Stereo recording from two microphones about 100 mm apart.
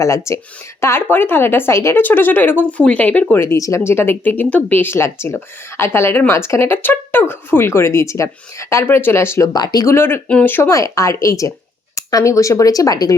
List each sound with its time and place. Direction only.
0.3 s speech: 30° left (ahead or behind)
3.4 s speech: 30° left (ahead or behind)
9.5 s speech: 40° left (ahead or behind)
9.8 s speech: 25° left (ahead or behind)
10.7 s speech: 35° left (ahead or behind)